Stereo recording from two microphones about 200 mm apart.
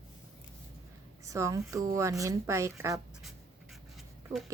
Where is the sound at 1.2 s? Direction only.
15° right (ahead or behind).